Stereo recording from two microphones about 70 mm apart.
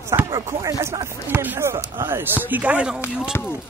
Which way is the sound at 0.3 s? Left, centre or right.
Right.